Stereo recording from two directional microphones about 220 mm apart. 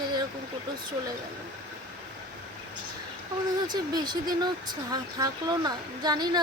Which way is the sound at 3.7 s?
20° right (ahead or behind).